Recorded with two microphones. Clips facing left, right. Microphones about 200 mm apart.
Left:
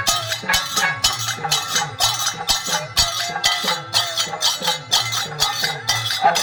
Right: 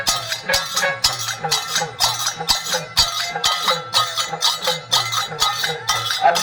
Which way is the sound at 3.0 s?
20° left (ahead or behind).